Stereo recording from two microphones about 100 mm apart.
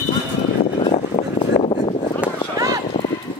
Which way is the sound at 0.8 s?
70° left (ahead or behind).